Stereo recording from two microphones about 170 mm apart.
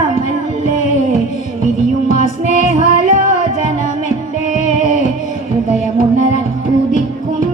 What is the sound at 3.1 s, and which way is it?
Music, 50° right (ahead or behind).